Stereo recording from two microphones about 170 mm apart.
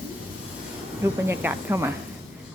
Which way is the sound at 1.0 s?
15° right (ahead or behind).